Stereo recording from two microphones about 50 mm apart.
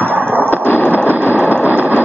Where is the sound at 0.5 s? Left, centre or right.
Left.